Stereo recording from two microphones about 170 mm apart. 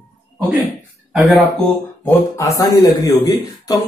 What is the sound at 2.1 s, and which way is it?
Speech, 15° left (ahead or behind).